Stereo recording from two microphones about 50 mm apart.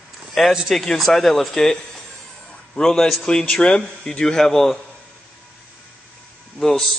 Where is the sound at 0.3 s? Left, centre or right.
Centre.